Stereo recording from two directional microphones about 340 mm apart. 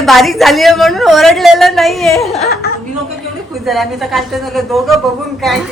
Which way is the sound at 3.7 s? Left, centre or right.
Centre.